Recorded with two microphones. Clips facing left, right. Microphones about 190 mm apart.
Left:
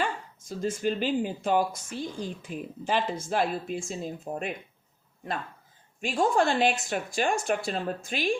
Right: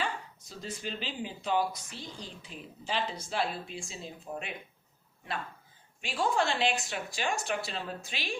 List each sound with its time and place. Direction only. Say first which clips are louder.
0.0 s speech: left 5 dB; 50° left (ahead or behind)
6.0 s speech: left 5 dB; 45° left (ahead or behind)